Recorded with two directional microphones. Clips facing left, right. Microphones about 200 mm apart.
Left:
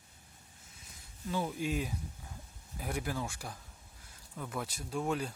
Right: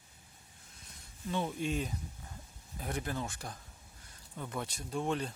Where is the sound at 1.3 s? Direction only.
5° left (ahead or behind).